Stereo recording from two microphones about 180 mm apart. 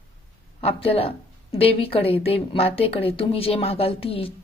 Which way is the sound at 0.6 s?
35° left (ahead or behind).